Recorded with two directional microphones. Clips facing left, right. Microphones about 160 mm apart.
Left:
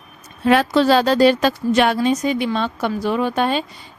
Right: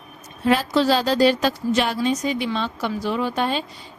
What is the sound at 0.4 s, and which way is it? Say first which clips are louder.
A woman's voice: left 4 dB; 65° left (ahead or behind).